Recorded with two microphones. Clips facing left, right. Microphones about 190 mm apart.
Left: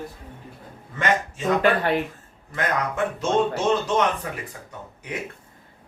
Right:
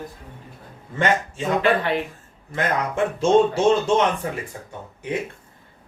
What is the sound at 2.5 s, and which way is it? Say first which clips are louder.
Speech: right 2 dB; 30° right (ahead or behind).